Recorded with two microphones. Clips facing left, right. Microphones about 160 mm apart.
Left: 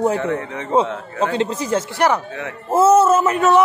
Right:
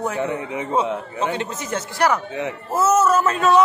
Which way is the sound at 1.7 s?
30° left (ahead or behind).